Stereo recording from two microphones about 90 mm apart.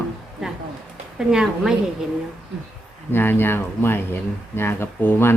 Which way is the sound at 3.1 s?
25° left (ahead or behind).